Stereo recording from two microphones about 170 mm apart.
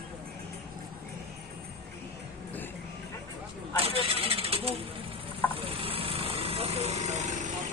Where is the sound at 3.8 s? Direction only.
35° right (ahead or behind).